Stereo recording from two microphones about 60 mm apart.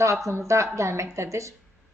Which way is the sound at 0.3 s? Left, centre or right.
Right.